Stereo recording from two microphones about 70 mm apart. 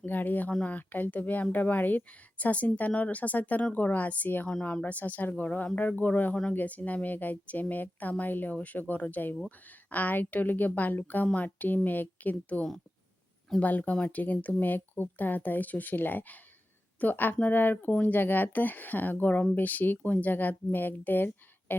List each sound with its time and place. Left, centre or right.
0.0 s speech: left